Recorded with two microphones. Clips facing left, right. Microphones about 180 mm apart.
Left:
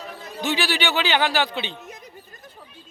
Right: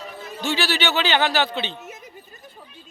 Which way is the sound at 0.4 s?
15° left (ahead or behind).